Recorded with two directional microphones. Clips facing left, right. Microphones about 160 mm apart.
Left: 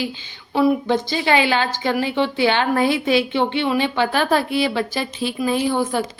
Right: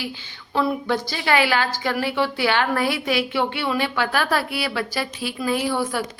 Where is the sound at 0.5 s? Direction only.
20° left (ahead or behind).